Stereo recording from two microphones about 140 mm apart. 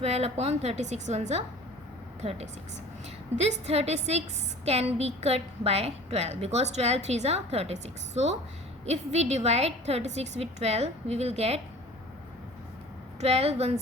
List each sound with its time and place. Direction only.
0.0 s a woman's voice: 50° right (ahead or behind)
3.3 s a woman's voice: 50° right (ahead or behind)
13.1 s a woman's voice: 50° right (ahead or behind)